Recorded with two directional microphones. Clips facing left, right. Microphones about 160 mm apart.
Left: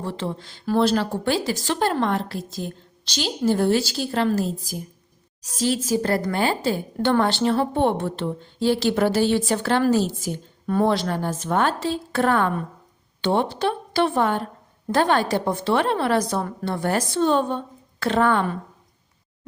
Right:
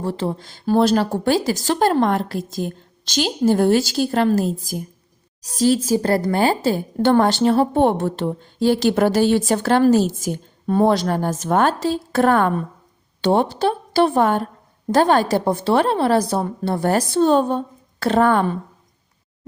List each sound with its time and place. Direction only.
0.0 s a woman's voice: 40° right (ahead or behind)